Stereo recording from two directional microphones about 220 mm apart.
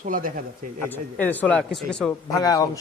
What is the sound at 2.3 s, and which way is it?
Speech, 15° left (ahead or behind).